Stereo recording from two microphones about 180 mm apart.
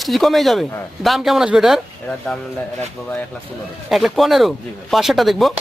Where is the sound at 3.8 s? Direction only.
Centre (ahead or behind).